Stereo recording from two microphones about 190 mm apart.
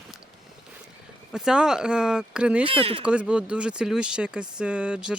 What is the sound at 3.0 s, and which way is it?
Speech, 5° right (ahead or behind).